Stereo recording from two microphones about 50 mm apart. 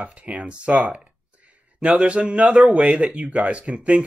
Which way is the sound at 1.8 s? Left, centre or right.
Right.